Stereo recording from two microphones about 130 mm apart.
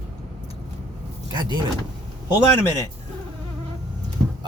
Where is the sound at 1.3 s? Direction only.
35° right (ahead or behind).